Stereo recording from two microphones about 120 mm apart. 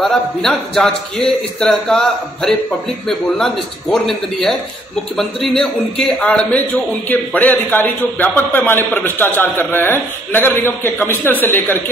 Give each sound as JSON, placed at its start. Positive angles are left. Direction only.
{"t": 0.0, "sound": "a man's voice", "side_deg": 0}